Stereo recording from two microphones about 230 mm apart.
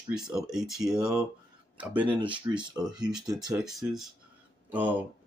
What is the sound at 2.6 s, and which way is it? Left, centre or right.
Speech, centre.